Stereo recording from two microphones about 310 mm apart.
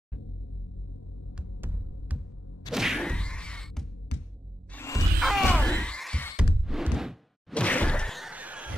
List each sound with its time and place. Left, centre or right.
1.4 s music: centre
2.7 s whack: centre
4.7 s music: centre
6.7 s a sound: centre